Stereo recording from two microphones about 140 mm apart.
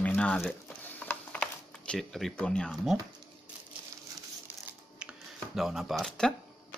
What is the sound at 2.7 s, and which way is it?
Speech, centre (ahead or behind).